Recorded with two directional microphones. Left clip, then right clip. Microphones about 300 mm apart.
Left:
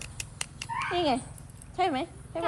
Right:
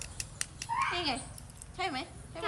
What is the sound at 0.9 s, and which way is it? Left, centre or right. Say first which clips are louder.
A woman's voice: left 6 dB; centre.